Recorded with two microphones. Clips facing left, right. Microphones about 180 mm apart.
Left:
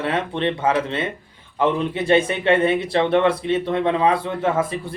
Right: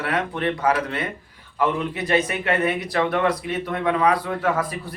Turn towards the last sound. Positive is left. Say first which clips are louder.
# left 2 dB
turn(degrees=25)  # may be behind; listen again after turning